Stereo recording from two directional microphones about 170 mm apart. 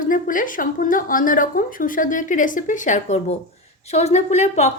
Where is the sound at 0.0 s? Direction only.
50° left (ahead or behind).